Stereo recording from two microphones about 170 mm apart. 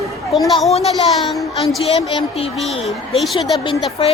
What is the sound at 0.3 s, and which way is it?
Speech, centre (ahead or behind).